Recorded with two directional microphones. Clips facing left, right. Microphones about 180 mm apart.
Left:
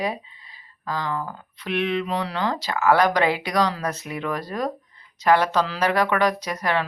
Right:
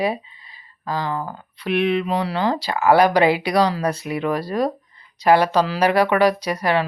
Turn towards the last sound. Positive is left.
turn(degrees=-10)  # may be behind; listen again after turning